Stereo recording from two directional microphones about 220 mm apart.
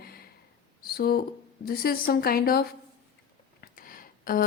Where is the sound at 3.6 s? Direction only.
40° left (ahead or behind).